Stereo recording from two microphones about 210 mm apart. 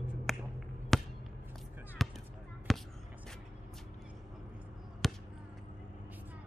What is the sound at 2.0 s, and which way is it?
Basketball bounce, centre (ahead or behind).